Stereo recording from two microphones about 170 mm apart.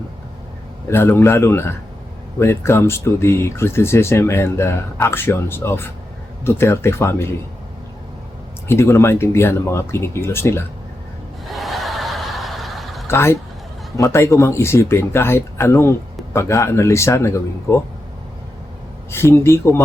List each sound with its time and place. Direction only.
0.9 s speech: 15° left (ahead or behind)
8.6 s speech: 15° left (ahead or behind)
11.4 s snicker: centre (ahead or behind)
13.1 s speech: 15° left (ahead or behind)
19.1 s speech: 15° left (ahead or behind)